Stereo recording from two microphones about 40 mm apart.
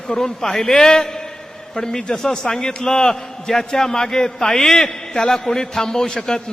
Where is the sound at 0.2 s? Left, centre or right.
Centre.